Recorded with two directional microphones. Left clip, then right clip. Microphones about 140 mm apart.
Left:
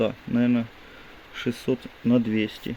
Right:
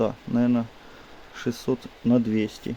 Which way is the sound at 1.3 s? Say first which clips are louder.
Left 1 dB; 20° left (ahead or behind).